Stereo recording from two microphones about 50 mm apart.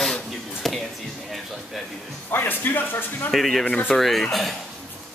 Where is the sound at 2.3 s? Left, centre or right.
Left.